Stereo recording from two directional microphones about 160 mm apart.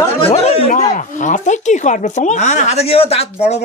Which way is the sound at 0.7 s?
55° left (ahead or behind).